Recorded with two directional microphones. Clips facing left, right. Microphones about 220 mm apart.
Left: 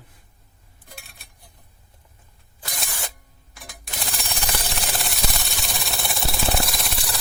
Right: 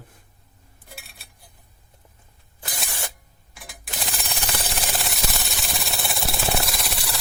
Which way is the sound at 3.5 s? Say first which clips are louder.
Even; 5° right (ahead or behind).